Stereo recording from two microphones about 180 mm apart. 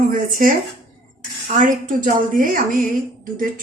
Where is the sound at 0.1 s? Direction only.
50° right (ahead or behind).